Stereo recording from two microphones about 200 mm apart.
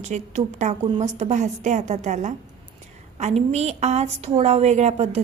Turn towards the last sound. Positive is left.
turn(degrees=-35)  # may be behind; listen again after turning